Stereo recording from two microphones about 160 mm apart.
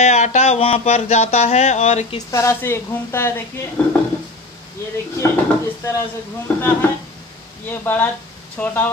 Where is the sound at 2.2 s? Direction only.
20° left (ahead or behind).